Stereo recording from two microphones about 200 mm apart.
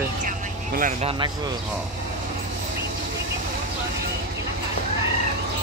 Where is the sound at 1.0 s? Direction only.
20° right (ahead or behind).